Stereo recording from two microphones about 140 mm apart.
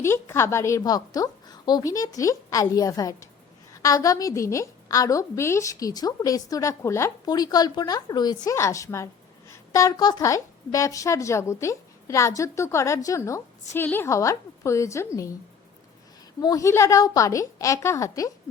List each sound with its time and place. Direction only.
0.0 s a woman's voice: 20° left (ahead or behind)
16.4 s a woman's voice: 25° left (ahead or behind)